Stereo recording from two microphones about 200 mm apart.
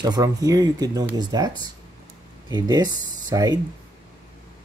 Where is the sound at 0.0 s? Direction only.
20° right (ahead or behind).